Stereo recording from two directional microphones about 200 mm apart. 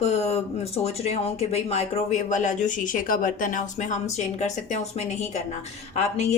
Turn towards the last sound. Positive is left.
turn(degrees=35)  # may be behind; listen again after turning